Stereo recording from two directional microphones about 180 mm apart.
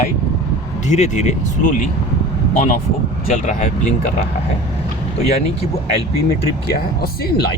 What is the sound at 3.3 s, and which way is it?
Speech, 45° left (ahead or behind).